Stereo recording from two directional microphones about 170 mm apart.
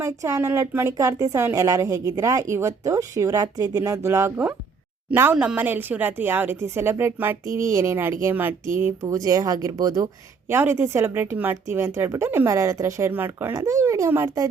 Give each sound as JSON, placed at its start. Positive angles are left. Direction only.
{"t": 0.0, "sound": "a woman's voice", "side_deg": -20}